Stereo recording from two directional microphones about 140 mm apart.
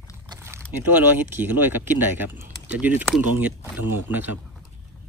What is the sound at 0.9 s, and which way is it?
Speech, 15° right (ahead or behind).